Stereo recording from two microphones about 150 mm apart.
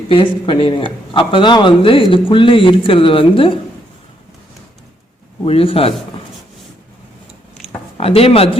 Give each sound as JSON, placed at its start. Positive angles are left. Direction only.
{"t": 0.1, "sound": "speech", "side_deg": 35}
{"t": 5.5, "sound": "speech", "side_deg": 40}
{"t": 7.9, "sound": "speech", "side_deg": 40}